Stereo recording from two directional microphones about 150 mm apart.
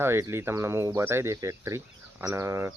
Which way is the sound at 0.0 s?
15° right (ahead or behind).